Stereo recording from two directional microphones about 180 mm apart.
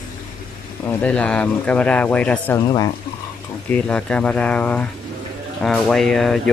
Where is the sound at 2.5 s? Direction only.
20° left (ahead or behind).